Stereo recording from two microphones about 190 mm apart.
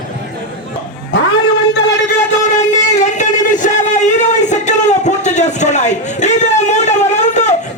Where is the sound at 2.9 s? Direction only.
40° left (ahead or behind).